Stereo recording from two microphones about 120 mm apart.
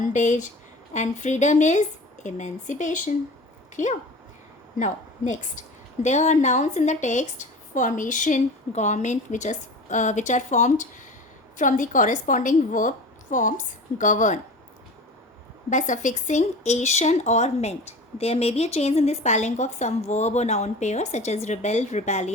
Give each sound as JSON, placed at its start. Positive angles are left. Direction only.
{"t": 0.0, "sound": "a woman's voice", "side_deg": 90}
{"t": 5.3, "sound": "a woman's voice", "side_deg": 85}
{"t": 15.7, "sound": "speech", "side_deg": 90}